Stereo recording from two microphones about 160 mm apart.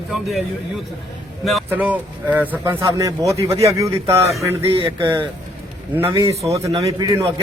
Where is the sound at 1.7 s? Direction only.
10° right (ahead or behind).